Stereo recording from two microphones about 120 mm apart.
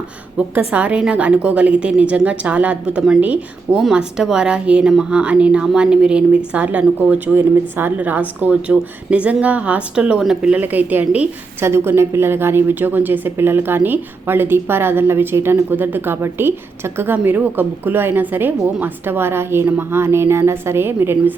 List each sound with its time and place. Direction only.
0.3 s a woman's voice: 10° right (ahead or behind)
3.8 s a woman's voice: 5° right (ahead or behind); by 21.3 s 20° right (ahead or behind)